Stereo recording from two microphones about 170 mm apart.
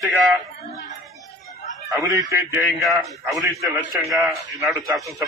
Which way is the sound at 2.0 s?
20° right (ahead or behind).